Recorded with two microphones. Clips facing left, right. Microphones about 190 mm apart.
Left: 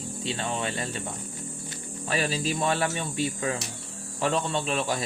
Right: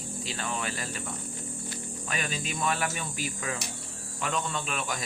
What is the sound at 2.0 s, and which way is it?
Speech, 30° left (ahead or behind).